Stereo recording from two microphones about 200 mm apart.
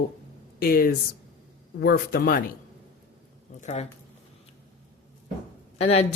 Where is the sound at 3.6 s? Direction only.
35° left (ahead or behind).